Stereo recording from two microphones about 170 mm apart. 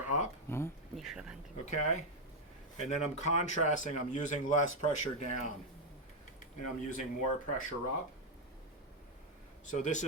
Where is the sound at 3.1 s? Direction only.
45° left (ahead or behind).